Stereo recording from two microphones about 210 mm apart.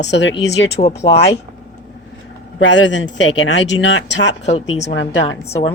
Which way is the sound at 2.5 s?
60° left (ahead or behind).